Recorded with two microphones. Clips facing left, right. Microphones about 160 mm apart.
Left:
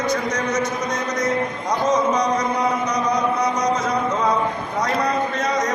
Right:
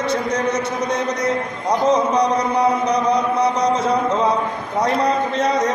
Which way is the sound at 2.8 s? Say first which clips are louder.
Right 3 dB; 30° right (ahead or behind).